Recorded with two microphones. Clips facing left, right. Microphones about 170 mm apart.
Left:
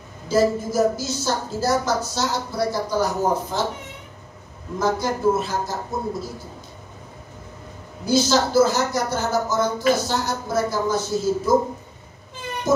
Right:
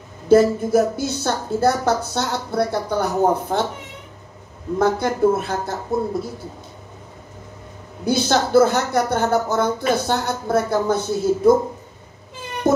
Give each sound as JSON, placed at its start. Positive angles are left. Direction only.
{"t": 0.3, "sound": "speech", "side_deg": -60}
{"t": 4.7, "sound": "speech", "side_deg": -60}
{"t": 8.0, "sound": "speech", "side_deg": -60}
{"t": 12.7, "sound": "speech", "side_deg": -60}